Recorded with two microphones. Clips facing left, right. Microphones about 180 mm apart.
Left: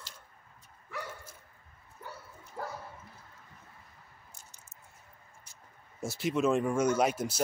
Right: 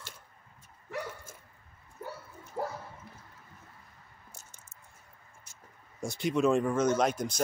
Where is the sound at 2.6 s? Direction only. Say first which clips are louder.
Right 5 dB; 20° right (ahead or behind).